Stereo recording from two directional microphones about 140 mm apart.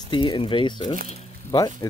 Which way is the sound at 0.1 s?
35° left (ahead or behind).